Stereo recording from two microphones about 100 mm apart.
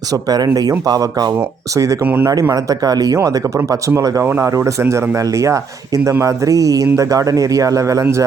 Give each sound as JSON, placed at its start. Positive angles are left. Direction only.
{"t": 0.1, "sound": "speech", "side_deg": -40}